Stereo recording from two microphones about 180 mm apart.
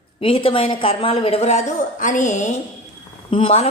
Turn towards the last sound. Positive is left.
turn(degrees=30)  # may be behind; listen again after turning